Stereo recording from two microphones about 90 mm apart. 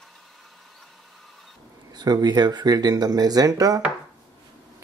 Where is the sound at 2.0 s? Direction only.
50° right (ahead or behind).